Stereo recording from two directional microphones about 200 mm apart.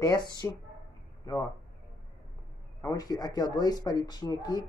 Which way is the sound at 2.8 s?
20° left (ahead or behind).